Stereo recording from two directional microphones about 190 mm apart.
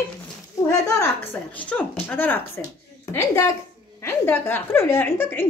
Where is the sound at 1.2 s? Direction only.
10° left (ahead or behind).